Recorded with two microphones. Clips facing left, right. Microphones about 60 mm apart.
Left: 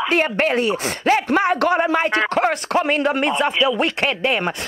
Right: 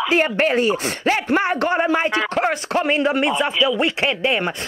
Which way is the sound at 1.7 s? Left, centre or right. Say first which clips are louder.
Left 1 dB; centre.